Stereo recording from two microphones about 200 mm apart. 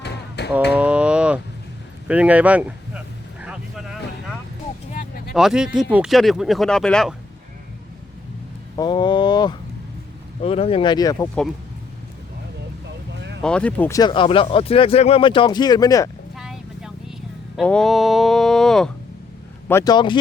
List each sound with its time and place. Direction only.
0.0 s a sound: 55° left (ahead or behind)
0.7 s a sound: 5° right (ahead or behind)
2.0 s speech: 5° right (ahead or behind)
3.4 s vehicle: 5° right (ahead or behind)
4.9 s a sound: 50° left (ahead or behind)
5.3 s speech: centre (ahead or behind)
8.7 s speech: 20° left (ahead or behind)
13.4 s speech: 5° left (ahead or behind)
16.3 s vehicle: centre (ahead or behind)
17.6 s speech: 5° left (ahead or behind)
19.6 s speech: 15° left (ahead or behind)